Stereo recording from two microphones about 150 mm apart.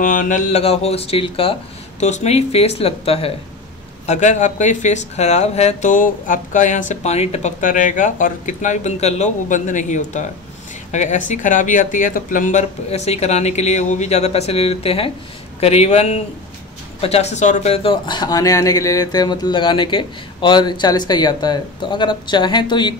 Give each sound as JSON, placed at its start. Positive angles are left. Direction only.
{"t": 0.0, "sound": "speech", "side_deg": 60}